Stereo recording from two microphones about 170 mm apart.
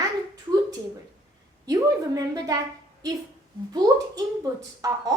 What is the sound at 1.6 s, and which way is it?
Speech, 20° right (ahead or behind).